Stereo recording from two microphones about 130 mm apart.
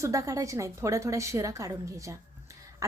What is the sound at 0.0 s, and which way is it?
A woman's voice, 25° right (ahead or behind).